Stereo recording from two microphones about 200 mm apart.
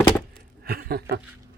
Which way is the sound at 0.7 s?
50° right (ahead or behind).